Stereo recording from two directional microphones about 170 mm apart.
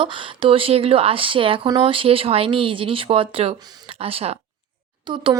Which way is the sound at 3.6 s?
25° right (ahead or behind).